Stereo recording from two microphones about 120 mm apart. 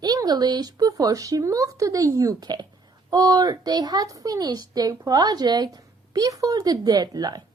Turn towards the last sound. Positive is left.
turn(degrees=-35)  # may be behind; listen again after turning